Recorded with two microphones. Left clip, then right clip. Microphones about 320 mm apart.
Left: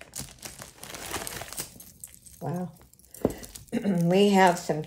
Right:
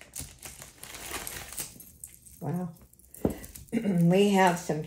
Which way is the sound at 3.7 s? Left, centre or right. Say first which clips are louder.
Left 1 dB; centre.